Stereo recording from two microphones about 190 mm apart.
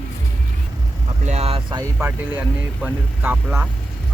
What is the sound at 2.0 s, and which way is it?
Speech, 10° right (ahead or behind).